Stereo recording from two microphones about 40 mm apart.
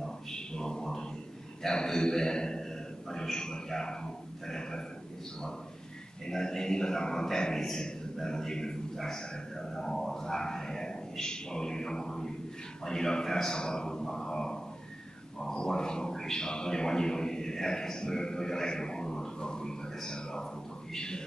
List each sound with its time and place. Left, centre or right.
0.0 s a sound: centre
1.6 s a man's voice: centre
6.2 s a man's voice: centre